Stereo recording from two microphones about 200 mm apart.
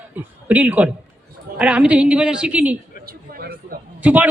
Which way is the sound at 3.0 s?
50° right (ahead or behind).